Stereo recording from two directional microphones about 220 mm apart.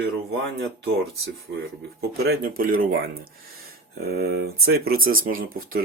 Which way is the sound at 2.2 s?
45° right (ahead or behind).